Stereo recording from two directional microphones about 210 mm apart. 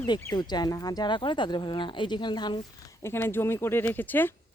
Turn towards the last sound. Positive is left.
turn(degrees=10)  # may be behind; listen again after turning